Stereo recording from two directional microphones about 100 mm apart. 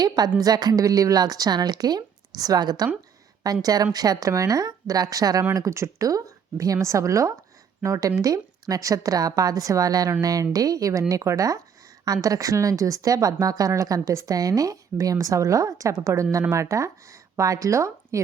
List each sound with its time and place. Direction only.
0.0 s a woman's voice: 40° right (ahead or behind)